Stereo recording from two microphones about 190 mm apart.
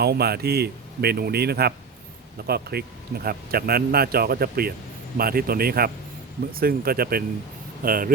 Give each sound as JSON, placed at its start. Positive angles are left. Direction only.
{"t": 0.0, "sound": "a man's voice", "side_deg": -55}